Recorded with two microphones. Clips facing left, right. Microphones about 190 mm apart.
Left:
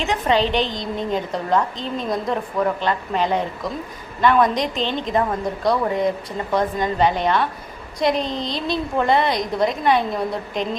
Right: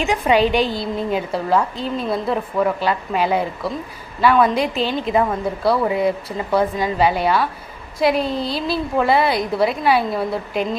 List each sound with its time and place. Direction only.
0.0 s a woman's voice: 10° right (ahead or behind)